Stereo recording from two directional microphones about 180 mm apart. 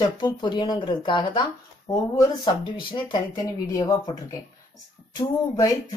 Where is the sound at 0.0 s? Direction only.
25° left (ahead or behind).